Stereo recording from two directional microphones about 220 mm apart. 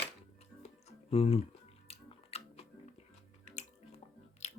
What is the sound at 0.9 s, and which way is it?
Music, 25° left (ahead or behind).